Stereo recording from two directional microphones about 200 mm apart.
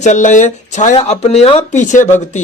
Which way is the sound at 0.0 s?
35° left (ahead or behind).